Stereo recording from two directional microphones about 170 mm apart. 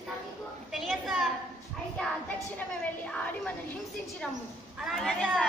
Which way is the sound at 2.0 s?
5° left (ahead or behind).